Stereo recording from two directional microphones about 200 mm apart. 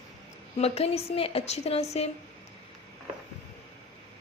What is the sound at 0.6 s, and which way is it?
A woman's voice, 30° left (ahead or behind).